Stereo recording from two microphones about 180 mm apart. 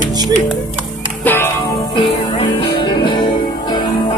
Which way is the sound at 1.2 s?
10° left (ahead or behind).